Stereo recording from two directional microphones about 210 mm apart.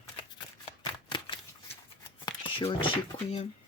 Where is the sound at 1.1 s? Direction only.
25° left (ahead or behind).